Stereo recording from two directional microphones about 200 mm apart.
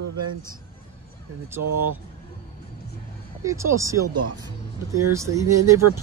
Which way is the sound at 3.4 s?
15° right (ahead or behind).